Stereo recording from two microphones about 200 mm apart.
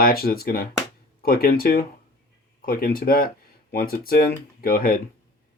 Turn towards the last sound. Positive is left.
turn(degrees=45)  # may be behind; listen again after turning